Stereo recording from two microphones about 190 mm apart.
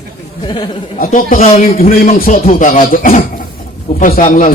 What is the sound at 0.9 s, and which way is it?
Speech, 45° left (ahead or behind).